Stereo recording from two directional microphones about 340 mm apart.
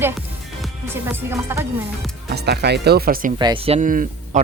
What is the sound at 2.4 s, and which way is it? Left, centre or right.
Speech, right.